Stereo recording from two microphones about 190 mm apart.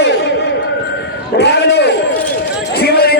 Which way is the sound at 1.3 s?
65° left (ahead or behind).